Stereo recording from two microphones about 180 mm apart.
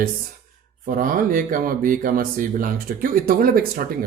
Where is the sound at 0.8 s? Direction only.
50° right (ahead or behind).